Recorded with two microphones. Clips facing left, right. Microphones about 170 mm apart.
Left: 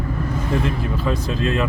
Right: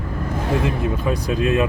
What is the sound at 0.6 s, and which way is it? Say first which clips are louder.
Speech: right 1 dB; 15° right (ahead or behind).